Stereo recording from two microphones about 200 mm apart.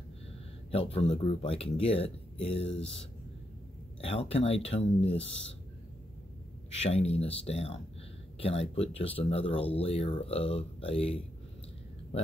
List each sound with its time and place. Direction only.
0.7 s speech: 30° left (ahead or behind)
4.0 s speech: 30° left (ahead or behind)
6.7 s speech: 30° left (ahead or behind)